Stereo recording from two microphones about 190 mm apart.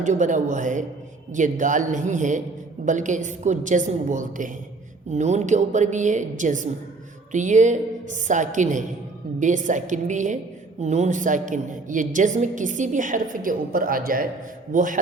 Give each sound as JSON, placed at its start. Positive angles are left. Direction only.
{"t": 0.0, "sound": "a woman's voice", "side_deg": -40}